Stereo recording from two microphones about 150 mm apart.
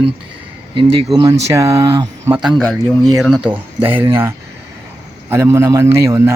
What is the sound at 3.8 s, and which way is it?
A man's voice, 15° right (ahead or behind).